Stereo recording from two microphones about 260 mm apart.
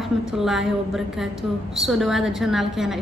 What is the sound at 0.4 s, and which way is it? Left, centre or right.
A woman's voice, centre.